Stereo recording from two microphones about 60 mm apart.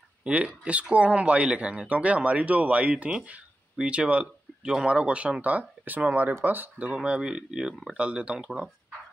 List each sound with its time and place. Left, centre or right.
0.2 s speech: centre
7.0 s speech: centre